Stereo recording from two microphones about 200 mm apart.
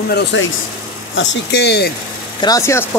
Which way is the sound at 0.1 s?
65° left (ahead or behind).